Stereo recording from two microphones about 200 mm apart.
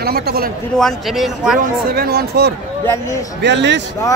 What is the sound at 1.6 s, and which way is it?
A man's voice, 50° right (ahead or behind).